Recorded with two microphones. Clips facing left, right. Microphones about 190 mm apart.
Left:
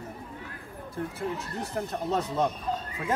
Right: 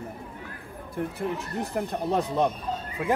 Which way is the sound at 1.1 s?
15° right (ahead or behind).